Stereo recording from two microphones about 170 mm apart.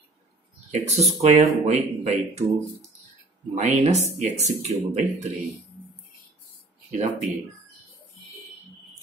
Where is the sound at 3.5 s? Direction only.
40° right (ahead or behind).